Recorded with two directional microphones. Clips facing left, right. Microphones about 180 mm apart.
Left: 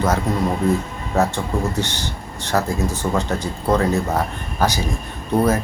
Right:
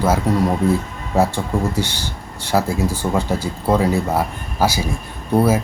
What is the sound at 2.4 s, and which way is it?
Speech, 10° right (ahead or behind).